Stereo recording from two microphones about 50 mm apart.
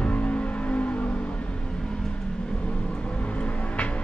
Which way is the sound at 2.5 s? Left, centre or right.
Left.